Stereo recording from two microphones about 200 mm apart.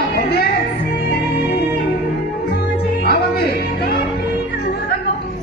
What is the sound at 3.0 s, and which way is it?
Music, 55° left (ahead or behind).